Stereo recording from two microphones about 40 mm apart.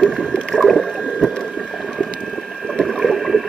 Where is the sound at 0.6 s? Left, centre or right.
Centre.